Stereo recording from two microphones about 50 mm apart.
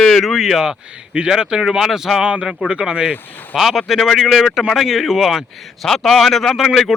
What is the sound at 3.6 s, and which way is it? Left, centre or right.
Speech, centre.